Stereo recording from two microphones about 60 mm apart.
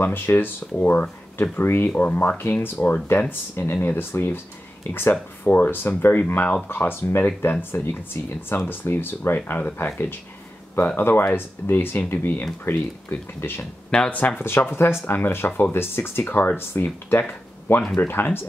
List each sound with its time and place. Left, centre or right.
0.0 s speech: left
1.9 s speech: left
2.3 s speech: left
7.0 s speech: left
11.0 s speech: left
13.4 s speech: left
13.8 s speech: centre
14.1 s speech: left
14.6 s speech: left
17.3 s a sound: left
17.9 s speech: left